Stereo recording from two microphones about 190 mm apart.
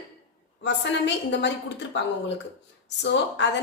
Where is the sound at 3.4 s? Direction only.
70° left (ahead or behind).